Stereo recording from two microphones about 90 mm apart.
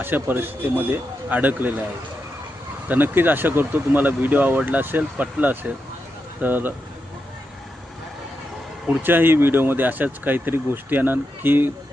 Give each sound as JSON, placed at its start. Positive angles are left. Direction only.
{"t": 0.0, "sound": "speech", "side_deg": -20}
{"t": 2.9, "sound": "speech", "side_deg": -20}
{"t": 8.9, "sound": "speech", "side_deg": -20}